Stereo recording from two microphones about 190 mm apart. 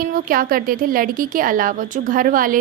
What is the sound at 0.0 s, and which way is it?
A woman's voice, 50° right (ahead or behind).